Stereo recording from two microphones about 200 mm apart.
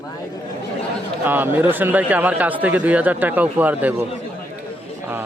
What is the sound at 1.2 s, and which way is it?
Speech, 10° right (ahead or behind).